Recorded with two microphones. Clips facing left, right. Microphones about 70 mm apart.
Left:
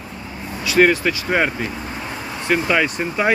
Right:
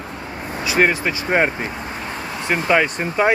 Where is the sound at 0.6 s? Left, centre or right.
Centre; by 3.2 s right.